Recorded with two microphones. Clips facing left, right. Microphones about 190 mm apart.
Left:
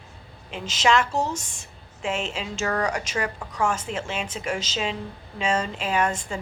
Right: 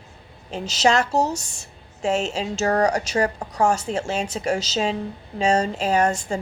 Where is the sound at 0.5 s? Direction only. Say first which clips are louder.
Right 2 dB; 40° right (ahead or behind).